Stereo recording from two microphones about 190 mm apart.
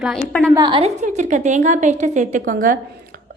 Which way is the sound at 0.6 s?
25° right (ahead or behind).